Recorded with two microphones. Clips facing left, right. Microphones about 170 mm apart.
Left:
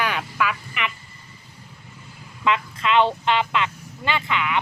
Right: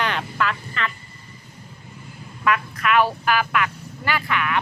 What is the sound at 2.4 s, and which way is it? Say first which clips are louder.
Speech: right 1 dB; 25° left (ahead or behind).